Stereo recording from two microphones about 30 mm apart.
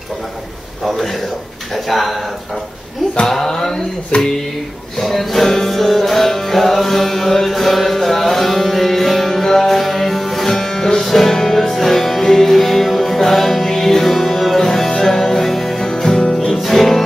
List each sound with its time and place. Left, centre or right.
0.8 s music: centre
1.7 s speech: centre
3.3 s a sound: centre
4.1 s music: left
4.9 s music: centre
15.8 s music: left
16.6 s music: centre